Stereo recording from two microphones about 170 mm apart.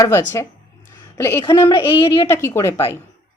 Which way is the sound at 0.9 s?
15° left (ahead or behind).